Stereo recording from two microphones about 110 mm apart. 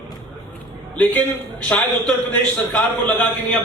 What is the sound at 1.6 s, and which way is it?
A man's voice, 15° left (ahead or behind).